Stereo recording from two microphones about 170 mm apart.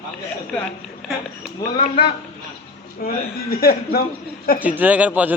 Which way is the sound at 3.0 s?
60° left (ahead or behind).